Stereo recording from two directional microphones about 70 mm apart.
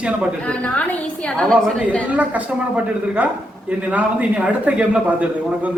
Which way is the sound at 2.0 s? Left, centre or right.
Right.